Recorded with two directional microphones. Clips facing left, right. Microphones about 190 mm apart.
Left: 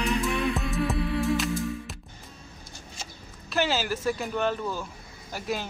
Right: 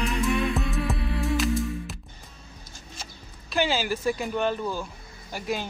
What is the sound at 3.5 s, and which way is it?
Speech, centre (ahead or behind).